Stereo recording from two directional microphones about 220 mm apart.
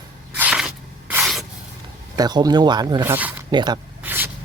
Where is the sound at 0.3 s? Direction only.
5° right (ahead or behind).